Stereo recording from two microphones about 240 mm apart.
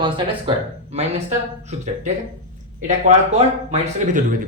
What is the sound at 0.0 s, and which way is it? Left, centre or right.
Speech, right.